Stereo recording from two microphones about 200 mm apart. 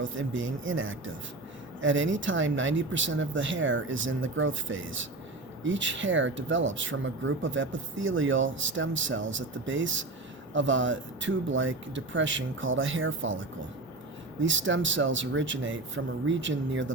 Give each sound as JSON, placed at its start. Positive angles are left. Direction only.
{"t": 0.0, "sound": "speech", "side_deg": -70}
{"t": 14.4, "sound": "speech", "side_deg": -70}